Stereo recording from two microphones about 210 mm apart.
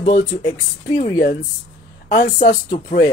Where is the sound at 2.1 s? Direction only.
35° left (ahead or behind).